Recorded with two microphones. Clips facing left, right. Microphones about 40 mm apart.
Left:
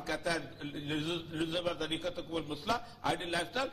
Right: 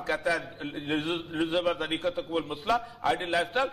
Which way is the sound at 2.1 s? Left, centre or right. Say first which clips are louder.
Right 7 dB; right.